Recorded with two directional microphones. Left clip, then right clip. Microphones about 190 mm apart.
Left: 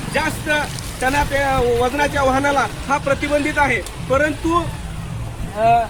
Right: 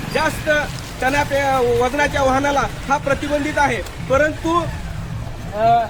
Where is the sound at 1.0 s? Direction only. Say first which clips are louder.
Even; 15° right (ahead or behind).